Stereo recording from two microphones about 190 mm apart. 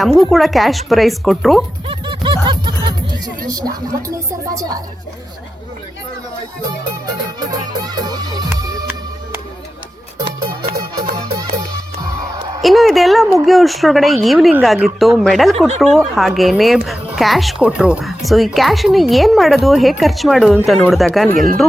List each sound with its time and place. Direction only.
0.0 s a woman's voice: centre (ahead or behind)
1.9 s music: 25° right (ahead or behind)
3.5 s a woman's voice: 20° right (ahead or behind)
7.3 s music: 20° right (ahead or behind)
11.1 s music: 20° right (ahead or behind)
12.6 s a woman's voice: centre (ahead or behind)